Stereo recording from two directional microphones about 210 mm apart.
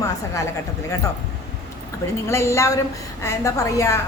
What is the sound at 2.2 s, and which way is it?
A man's voice, 15° left (ahead or behind).